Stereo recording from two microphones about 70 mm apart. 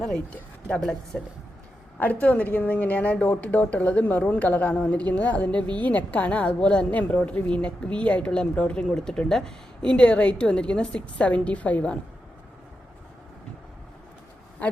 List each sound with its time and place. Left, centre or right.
0.0 s a woman's voice: centre
2.2 s a woman's voice: left
8.9 s a woman's voice: centre